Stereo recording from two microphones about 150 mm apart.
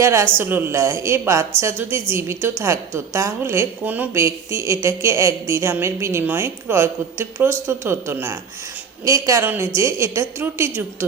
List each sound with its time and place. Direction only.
0.0 s a woman's voice: 20° right (ahead or behind)